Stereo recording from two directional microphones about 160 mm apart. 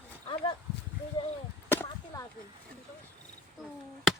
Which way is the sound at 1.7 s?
15° left (ahead or behind).